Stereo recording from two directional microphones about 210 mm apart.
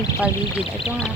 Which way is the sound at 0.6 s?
25° left (ahead or behind).